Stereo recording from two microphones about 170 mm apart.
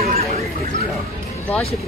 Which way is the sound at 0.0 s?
40° right (ahead or behind).